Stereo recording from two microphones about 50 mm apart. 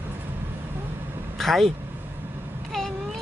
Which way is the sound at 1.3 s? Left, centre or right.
Centre.